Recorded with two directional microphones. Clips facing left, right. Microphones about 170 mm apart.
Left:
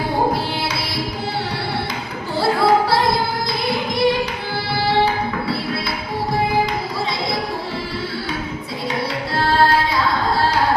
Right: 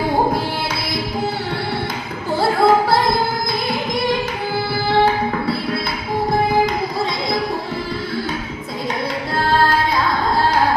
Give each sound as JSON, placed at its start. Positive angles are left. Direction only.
{"t": 2.3, "sound": "music", "side_deg": -50}
{"t": 9.3, "sound": "tabla", "side_deg": -50}